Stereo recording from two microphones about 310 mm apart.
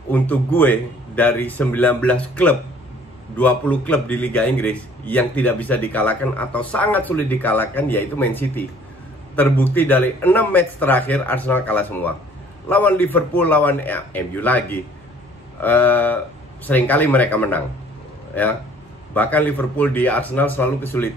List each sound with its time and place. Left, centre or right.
0.1 s a man's voice: centre
19.1 s a man's voice: centre